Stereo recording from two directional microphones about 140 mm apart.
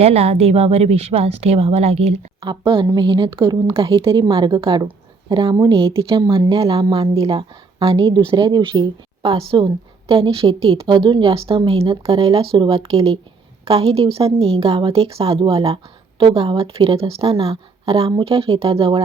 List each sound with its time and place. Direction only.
0.0 s a woman's voice: 45° right (ahead or behind)